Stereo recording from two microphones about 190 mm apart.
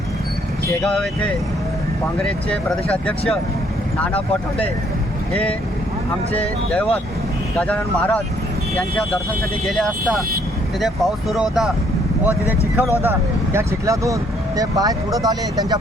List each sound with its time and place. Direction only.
0.8 s speech: 5° left (ahead or behind)
6.3 s speech: 5° left (ahead or behind)
9.6 s speech: centre (ahead or behind); by 15.8 s 20° right (ahead or behind)